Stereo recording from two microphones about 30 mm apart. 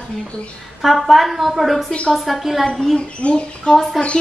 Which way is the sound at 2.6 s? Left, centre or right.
Centre.